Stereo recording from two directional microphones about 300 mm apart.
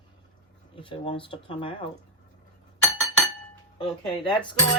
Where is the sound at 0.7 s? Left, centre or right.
Centre.